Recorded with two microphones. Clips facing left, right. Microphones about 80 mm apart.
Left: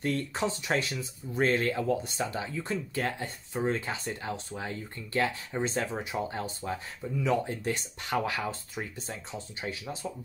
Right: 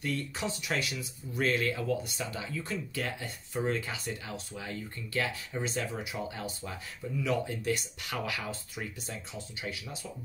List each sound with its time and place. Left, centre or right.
0.0 s speech: left
3.5 s speech: left